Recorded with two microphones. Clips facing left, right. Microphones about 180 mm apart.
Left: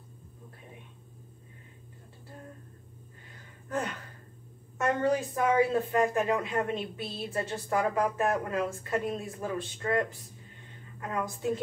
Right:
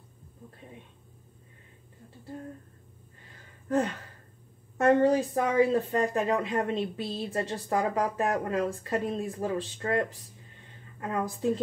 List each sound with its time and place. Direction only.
3.6 s speech: 35° right (ahead or behind)
5.0 s a woman's voice: 35° right (ahead or behind)